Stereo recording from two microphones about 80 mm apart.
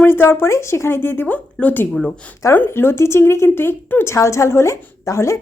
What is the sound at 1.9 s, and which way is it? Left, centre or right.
Speech, centre.